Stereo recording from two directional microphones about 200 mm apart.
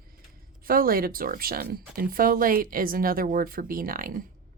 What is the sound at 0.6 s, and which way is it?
A woman's voice, 45° right (ahead or behind).